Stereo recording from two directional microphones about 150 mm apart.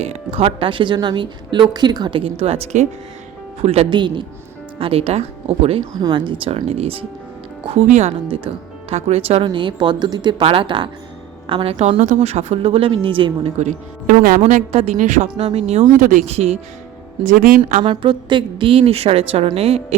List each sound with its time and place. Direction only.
0.0 s speech: 40° right (ahead or behind)
6.0 s speech: 30° right (ahead or behind)
13.6 s a woman's voice: 60° right (ahead or behind)
14.4 s a woman's voice: 45° right (ahead or behind)
15.9 s a woman's voice: 60° right (ahead or behind)
16.2 s a woman's voice: 45° right (ahead or behind)
17.2 s a woman's voice: 65° right (ahead or behind)
17.8 s speech: 30° right (ahead or behind)